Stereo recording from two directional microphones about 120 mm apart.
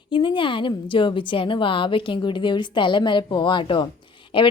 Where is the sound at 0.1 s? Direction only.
45° left (ahead or behind).